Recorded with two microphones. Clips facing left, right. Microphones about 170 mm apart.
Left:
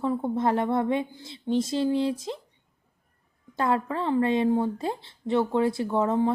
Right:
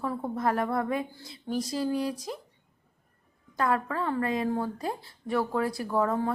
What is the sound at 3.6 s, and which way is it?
A woman's voice, 25° left (ahead or behind).